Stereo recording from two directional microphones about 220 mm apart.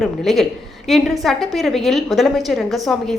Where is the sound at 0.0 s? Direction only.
Centre (ahead or behind).